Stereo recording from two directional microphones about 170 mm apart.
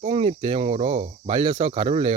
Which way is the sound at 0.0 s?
35° right (ahead or behind).